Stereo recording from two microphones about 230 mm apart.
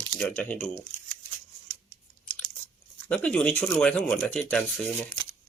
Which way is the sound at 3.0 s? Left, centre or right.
Centre.